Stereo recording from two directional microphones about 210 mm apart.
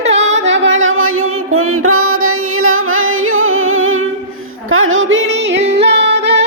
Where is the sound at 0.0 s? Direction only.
30° right (ahead or behind).